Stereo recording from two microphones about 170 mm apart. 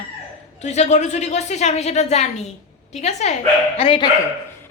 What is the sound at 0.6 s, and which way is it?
Speech, 40° left (ahead or behind).